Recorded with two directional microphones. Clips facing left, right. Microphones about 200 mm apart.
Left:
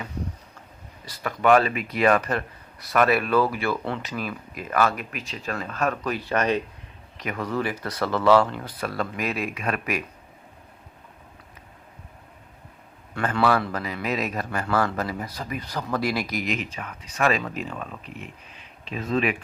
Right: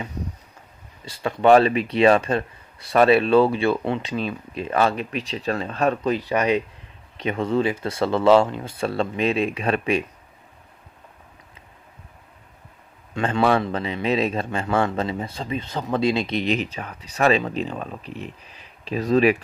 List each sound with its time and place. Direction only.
1.0 s speech: 25° right (ahead or behind)
7.2 s speech: 25° right (ahead or behind)
13.1 s speech: 25° right (ahead or behind); by 19.4 s 40° right (ahead or behind)